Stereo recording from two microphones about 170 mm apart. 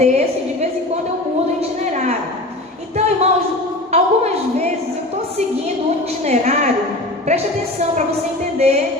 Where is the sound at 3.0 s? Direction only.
40° right (ahead or behind).